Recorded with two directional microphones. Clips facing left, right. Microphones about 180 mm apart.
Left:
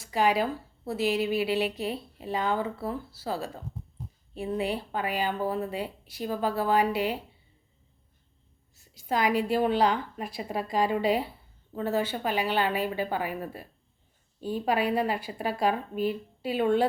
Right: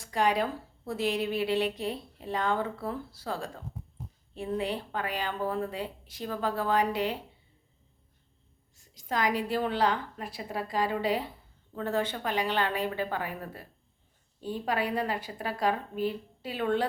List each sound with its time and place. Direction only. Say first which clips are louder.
0.0 s a woman's voice: left 2 dB; 5° left (ahead or behind)
8.7 s a woman's voice: left 3 dB; 10° left (ahead or behind)